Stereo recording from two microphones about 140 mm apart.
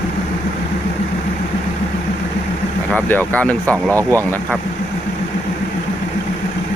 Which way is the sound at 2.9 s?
10° left (ahead or behind).